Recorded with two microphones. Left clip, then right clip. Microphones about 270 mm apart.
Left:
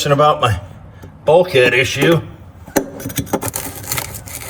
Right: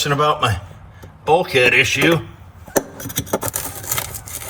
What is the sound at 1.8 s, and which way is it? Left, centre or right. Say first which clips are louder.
Speech: left 1 dB; centre.